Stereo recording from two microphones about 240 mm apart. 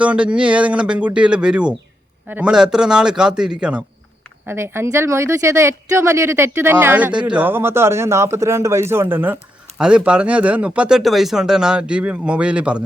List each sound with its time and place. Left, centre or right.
0.0 s a man's voice: centre